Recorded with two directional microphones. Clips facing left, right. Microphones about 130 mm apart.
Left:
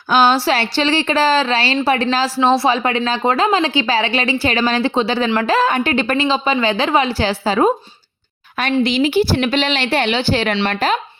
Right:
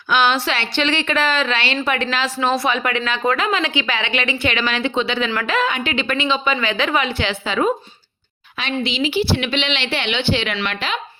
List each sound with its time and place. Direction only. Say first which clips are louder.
0.1 s a woman's voice: left 4 dB; 35° left (ahead or behind)